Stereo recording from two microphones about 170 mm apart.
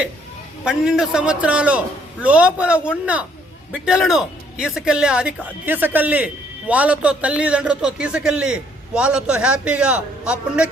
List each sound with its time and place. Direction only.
0.6 s a man's voice: 5° right (ahead or behind)